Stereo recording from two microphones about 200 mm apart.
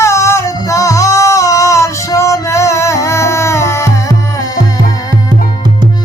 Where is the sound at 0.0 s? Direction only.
15° left (ahead or behind).